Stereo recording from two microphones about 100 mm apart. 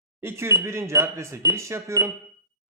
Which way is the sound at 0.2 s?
25° right (ahead or behind).